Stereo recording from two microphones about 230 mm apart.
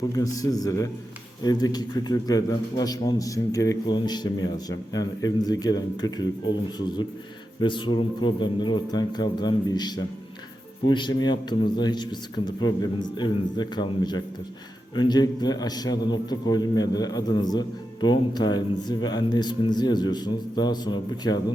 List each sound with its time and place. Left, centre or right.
0.1 s a man's voice: centre